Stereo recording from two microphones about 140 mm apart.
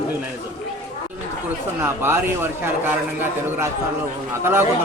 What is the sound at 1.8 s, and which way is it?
A man's voice, 15° right (ahead or behind).